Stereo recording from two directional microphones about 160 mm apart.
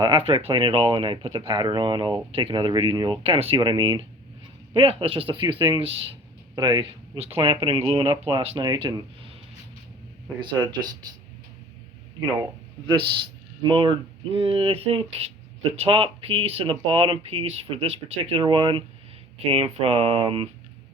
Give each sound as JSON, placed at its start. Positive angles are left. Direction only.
{"t": 0.0, "sound": "speech", "side_deg": -35}
{"t": 10.4, "sound": "speech", "side_deg": -30}
{"t": 12.9, "sound": "speech", "side_deg": -30}